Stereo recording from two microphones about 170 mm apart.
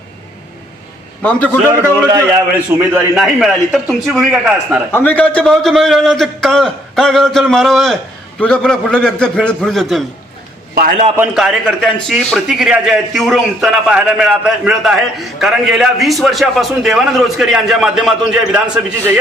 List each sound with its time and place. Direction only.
1.2 s a man's voice: 10° left (ahead or behind)
1.8 s a man's voice: 15° right (ahead or behind)
4.9 s a man's voice: 10° left (ahead or behind)
10.8 s a man's voice: 60° right (ahead or behind)
11.3 s a man's voice: centre (ahead or behind)